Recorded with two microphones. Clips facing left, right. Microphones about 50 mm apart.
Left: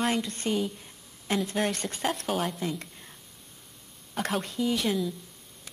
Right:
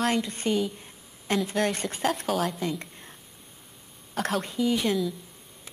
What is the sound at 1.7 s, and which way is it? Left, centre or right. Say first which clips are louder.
Speech: right 2 dB; centre.